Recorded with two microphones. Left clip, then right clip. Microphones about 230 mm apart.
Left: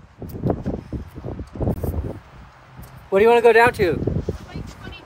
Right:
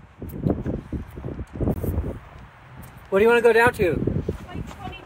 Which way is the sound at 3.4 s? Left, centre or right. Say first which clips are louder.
Left 3 dB; centre.